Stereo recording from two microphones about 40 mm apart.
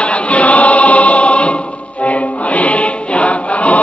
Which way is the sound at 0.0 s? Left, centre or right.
Left.